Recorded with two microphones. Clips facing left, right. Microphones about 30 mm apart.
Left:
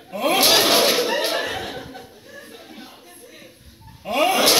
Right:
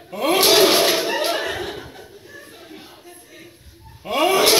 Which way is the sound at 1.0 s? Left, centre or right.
Left.